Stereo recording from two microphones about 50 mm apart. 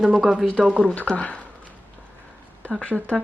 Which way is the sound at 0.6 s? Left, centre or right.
Right.